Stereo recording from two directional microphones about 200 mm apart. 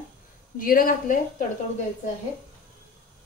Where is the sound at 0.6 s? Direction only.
45° left (ahead or behind).